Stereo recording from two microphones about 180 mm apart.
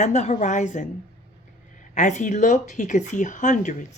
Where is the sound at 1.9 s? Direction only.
45° left (ahead or behind).